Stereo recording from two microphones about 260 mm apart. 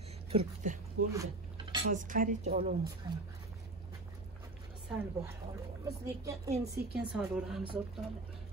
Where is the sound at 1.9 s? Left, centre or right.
Right.